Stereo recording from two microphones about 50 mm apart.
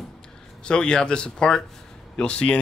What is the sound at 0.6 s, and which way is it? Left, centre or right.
A man's voice, centre.